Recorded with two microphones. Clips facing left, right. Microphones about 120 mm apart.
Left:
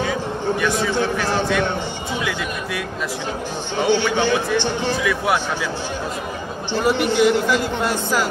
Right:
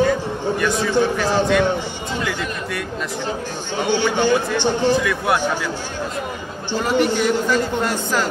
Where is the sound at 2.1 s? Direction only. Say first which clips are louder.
Right 1 dB; 5° left (ahead or behind).